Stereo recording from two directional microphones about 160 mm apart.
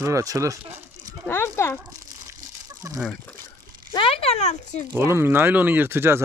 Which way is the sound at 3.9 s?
35° left (ahead or behind).